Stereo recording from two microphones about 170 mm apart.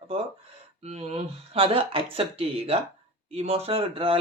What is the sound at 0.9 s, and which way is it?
Speech, 40° right (ahead or behind).